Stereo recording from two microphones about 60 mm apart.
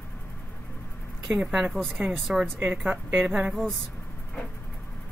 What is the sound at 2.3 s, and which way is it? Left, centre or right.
Speech, centre.